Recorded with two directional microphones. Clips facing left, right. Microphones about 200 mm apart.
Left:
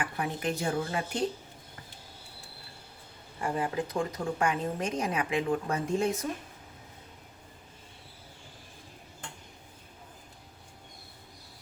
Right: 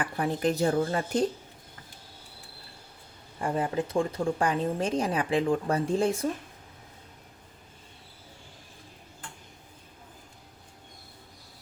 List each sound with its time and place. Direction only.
0.0 s a woman's voice: 35° right (ahead or behind)
3.4 s a woman's voice: 30° right (ahead or behind)